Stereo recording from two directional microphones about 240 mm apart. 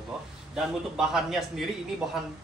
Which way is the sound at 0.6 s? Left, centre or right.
Centre.